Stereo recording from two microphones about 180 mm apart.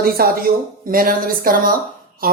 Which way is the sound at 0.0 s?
55° right (ahead or behind).